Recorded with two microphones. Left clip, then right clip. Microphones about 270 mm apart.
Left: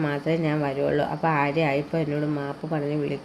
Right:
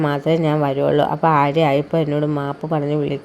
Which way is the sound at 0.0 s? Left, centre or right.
Right.